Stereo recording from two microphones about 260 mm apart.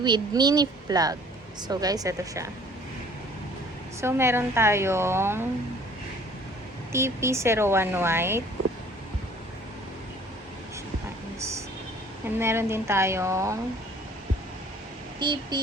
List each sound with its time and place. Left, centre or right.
0.0 s speech: centre
4.0 s speech: centre
6.9 s speech: centre
11.3 s a sound: centre
12.4 s speech: centre
15.2 s speech: centre